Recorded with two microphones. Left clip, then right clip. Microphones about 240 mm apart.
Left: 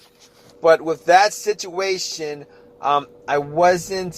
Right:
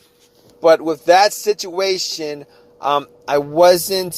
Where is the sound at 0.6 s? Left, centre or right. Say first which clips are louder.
Right 3 dB; right.